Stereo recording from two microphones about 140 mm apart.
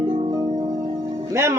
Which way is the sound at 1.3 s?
20° right (ahead or behind).